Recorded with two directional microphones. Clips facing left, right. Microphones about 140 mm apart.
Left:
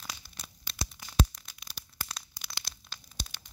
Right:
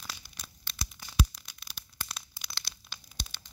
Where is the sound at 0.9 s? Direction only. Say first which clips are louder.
Left 2 dB; 5° right (ahead or behind).